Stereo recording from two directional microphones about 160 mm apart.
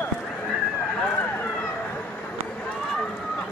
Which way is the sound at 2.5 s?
5° left (ahead or behind).